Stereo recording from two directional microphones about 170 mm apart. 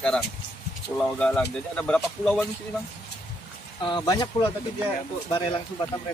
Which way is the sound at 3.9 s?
25° left (ahead or behind).